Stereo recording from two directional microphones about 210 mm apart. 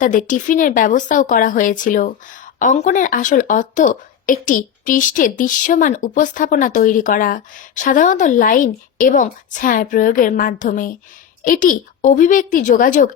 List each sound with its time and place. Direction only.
0.0 s speech: 40° left (ahead or behind)